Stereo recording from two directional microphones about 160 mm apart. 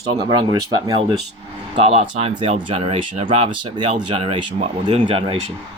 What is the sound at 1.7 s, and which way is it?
A man's voice, 40° right (ahead or behind).